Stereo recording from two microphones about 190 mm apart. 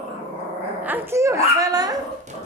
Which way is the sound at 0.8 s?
10° right (ahead or behind).